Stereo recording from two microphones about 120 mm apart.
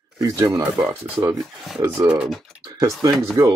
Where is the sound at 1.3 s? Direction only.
Centre (ahead or behind).